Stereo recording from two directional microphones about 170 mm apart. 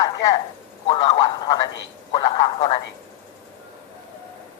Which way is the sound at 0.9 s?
25° left (ahead or behind).